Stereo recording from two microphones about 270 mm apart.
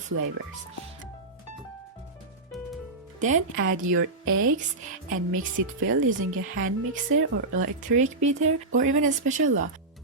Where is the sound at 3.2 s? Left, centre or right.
Right.